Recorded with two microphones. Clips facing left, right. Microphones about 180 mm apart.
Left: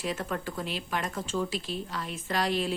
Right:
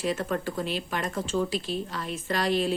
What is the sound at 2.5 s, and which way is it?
Speech, 40° right (ahead or behind).